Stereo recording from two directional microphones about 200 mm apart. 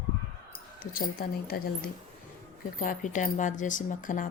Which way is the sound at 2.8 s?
40° left (ahead or behind).